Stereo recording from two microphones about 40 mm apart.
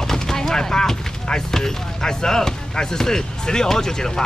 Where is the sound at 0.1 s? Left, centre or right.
Centre.